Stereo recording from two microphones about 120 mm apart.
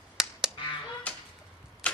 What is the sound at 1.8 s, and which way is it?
Tick-tock, 10° left (ahead or behind).